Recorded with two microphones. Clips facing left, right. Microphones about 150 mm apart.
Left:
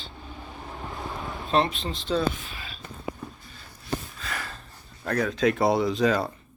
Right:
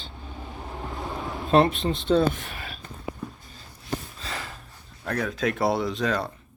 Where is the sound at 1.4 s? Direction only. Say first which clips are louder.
Right 5 dB; 50° right (ahead or behind).